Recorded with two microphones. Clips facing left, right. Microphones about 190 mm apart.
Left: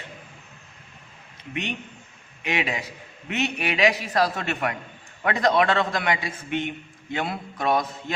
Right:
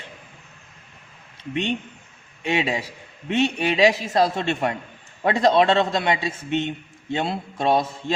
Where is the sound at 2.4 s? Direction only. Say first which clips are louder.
Right 4 dB; 30° right (ahead or behind).